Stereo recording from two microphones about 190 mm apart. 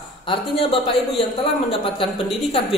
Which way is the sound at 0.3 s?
30° left (ahead or behind).